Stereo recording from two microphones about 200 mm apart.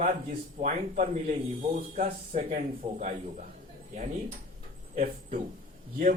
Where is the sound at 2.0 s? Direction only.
40° right (ahead or behind).